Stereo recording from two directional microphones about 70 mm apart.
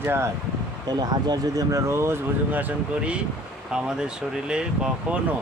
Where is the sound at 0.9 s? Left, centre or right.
Right.